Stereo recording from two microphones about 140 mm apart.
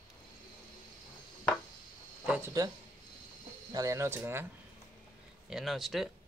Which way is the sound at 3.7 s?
20° right (ahead or behind).